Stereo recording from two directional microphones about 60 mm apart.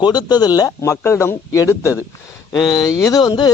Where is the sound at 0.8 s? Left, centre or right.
Left.